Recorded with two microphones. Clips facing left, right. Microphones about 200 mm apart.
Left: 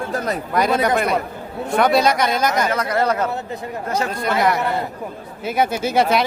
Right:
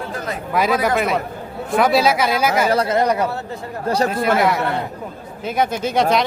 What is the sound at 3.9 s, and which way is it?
Speech, 35° right (ahead or behind).